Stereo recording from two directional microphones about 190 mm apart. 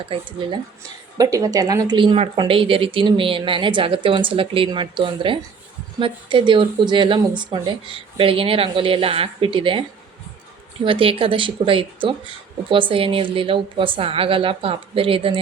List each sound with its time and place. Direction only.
0.1 s speech: 25° right (ahead or behind)
10.8 s speech: 30° right (ahead or behind)